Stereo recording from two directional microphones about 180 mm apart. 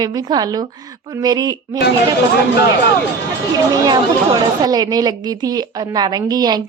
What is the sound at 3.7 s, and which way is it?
A woman's voice, 20° right (ahead or behind).